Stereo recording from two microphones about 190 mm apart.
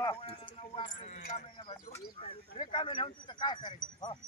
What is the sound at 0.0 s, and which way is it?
Clip-clop, 30° left (ahead or behind).